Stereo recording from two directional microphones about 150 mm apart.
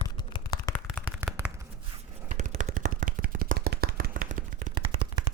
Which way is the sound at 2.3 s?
55° right (ahead or behind).